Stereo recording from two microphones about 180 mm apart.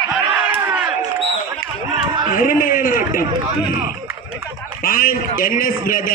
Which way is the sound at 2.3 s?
50° left (ahead or behind).